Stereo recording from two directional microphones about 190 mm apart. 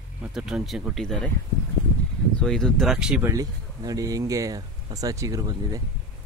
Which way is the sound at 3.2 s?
20° right (ahead or behind).